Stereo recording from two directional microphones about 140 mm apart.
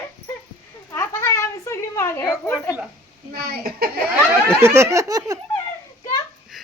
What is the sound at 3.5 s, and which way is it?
Speech, 90° right.